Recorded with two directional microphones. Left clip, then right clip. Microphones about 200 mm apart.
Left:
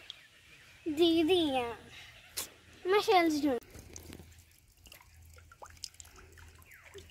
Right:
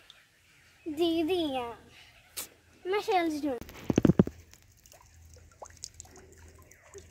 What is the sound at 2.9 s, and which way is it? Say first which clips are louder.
Speech: left 2 dB; 15° left (ahead or behind).